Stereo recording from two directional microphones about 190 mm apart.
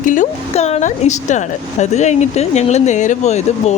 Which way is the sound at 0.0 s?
40° left (ahead or behind).